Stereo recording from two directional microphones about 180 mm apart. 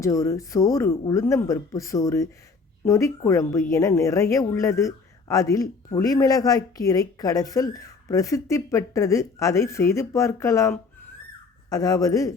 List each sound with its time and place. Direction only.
0.0 s a woman's voice: 15° left (ahead or behind)